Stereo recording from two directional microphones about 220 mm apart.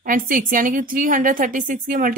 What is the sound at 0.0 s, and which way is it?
Speech, 40° right (ahead or behind).